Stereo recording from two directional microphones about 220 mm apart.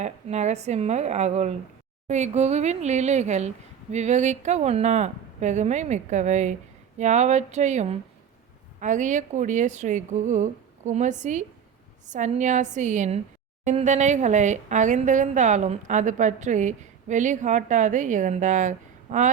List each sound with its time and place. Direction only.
0.0 s a woman's voice: 30° right (ahead or behind)